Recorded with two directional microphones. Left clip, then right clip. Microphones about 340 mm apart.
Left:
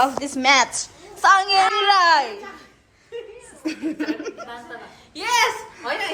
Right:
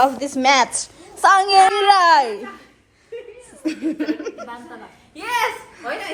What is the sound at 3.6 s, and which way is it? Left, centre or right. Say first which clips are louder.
Speech: right 3 dB; centre.